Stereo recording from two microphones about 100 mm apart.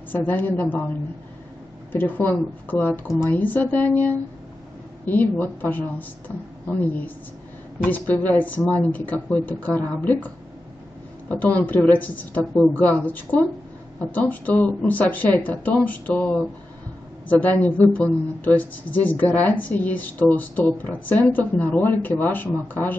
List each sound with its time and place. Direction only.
0.1 s a woman's voice: 20° left (ahead or behind)